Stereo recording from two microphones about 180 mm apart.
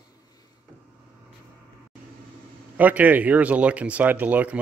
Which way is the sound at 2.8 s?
10° right (ahead or behind).